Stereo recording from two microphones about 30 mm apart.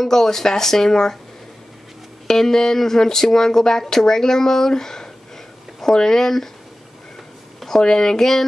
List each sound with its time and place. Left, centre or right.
0.0 s speech: centre
2.2 s speech: centre
7.8 s speech: left